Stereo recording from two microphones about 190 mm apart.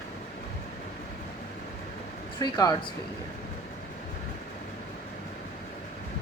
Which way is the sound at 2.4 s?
25° left (ahead or behind).